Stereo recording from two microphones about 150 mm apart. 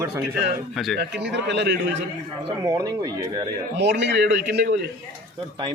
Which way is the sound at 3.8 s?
90° right.